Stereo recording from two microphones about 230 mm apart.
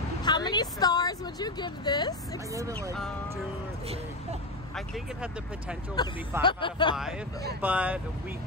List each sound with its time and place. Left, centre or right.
0.2 s a woman's voice: centre
3.8 s speech: right
4.7 s speech: centre
6.0 s speech: centre
7.6 s speech: centre